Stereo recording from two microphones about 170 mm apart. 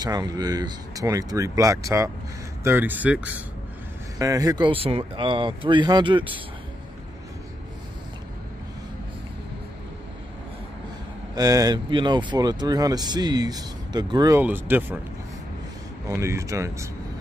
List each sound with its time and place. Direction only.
0.0 s speech: 25° right (ahead or behind)
4.2 s speech: 20° right (ahead or behind)
11.3 s speech: 20° right (ahead or behind)
14.4 s speech: 10° right (ahead or behind)
16.2 s speech: 15° right (ahead or behind)